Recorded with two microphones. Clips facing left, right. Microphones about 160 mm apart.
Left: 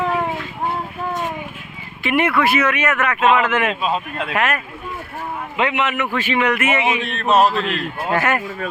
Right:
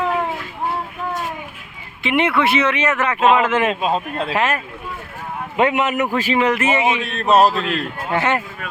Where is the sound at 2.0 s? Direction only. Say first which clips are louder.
Even; 20° right (ahead or behind).